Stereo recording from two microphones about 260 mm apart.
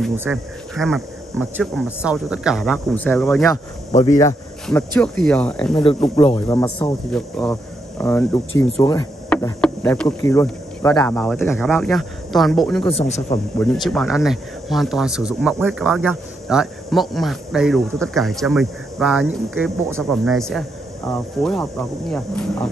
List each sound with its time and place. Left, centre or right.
0.1 s speech: centre
6.1 s speech: centre
6.4 s speech: centre
9.3 s speech: centre
12.8 s speech: left
13.8 s speech: centre